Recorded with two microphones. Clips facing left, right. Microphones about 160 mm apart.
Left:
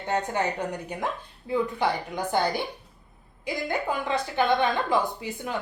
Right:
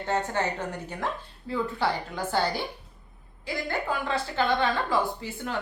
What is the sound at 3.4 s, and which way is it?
A woman's voice, 15° left (ahead or behind).